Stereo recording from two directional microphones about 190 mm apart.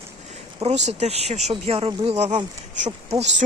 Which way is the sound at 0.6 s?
35° right (ahead or behind).